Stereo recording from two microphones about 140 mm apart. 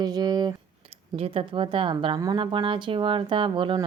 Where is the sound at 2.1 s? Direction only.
25° right (ahead or behind).